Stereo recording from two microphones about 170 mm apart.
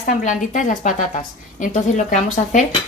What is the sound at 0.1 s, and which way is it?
Speech, 50° left (ahead or behind).